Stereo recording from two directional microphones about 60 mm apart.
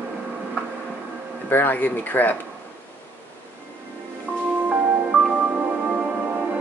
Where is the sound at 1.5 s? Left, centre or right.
Left.